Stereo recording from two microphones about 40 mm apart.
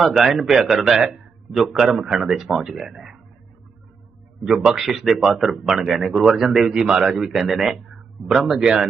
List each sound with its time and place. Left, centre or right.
0.0 s speech: centre
2.3 s speech: centre
4.4 s speech: centre
7.1 s speech: centre